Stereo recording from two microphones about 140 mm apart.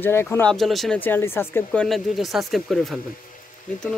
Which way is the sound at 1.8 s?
Centre (ahead or behind).